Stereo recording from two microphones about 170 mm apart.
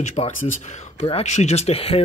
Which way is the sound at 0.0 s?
40° left (ahead or behind).